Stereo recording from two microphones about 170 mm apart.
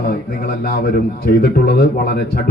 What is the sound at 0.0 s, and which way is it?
A man's voice, 60° left (ahead or behind).